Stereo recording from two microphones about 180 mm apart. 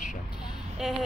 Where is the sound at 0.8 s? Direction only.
5° right (ahead or behind).